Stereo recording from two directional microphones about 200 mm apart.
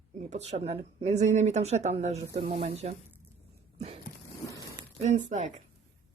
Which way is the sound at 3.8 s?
30° right (ahead or behind).